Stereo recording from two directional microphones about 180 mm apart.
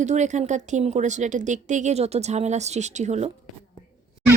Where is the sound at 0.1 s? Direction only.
40° right (ahead or behind).